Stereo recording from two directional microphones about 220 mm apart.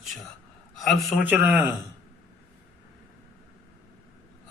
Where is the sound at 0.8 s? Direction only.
Centre (ahead or behind).